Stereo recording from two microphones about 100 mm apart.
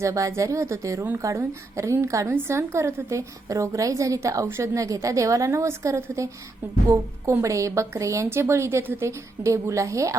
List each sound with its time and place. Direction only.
0.0 s a woman's voice: 30° right (ahead or behind)